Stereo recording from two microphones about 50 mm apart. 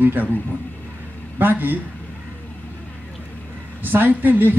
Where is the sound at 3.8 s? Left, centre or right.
Right.